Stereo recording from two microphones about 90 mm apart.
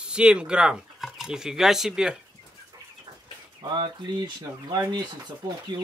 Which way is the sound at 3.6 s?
50° right (ahead or behind).